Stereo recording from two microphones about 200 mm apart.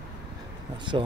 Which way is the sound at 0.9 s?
25° right (ahead or behind).